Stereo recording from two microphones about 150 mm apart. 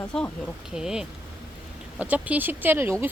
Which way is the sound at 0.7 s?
5° right (ahead or behind).